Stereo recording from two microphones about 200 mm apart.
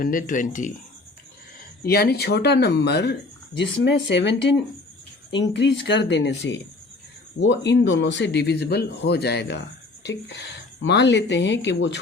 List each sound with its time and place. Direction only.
0.0 s speech: 40° left (ahead or behind)
1.8 s speech: 50° left (ahead or behind)